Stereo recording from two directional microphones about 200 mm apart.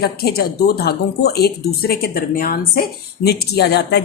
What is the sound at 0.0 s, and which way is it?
A woman's voice, 50° left (ahead or behind).